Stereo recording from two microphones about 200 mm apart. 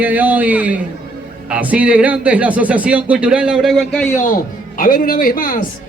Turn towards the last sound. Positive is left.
turn(degrees=45)  # may be behind; listen again after turning